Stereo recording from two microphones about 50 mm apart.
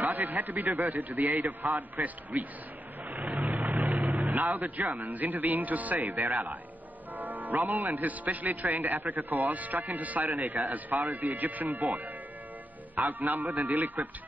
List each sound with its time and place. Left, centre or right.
0.0 s a man's voice: right
3.1 s vehicle: right
4.2 s speech: right
6.2 s a man's voice: right
7.2 s music: right
7.6 s speech: right